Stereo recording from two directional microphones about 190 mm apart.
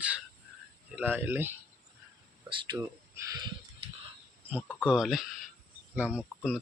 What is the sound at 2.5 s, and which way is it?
Speech, 25° right (ahead or behind).